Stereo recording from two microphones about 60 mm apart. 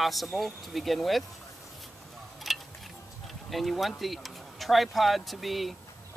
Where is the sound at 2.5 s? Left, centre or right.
Centre.